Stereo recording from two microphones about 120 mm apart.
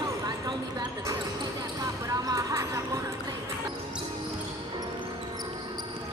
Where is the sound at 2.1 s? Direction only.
30° right (ahead or behind).